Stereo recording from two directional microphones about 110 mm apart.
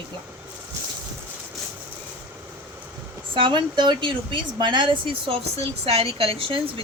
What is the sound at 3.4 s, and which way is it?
Speech, 45° right (ahead or behind).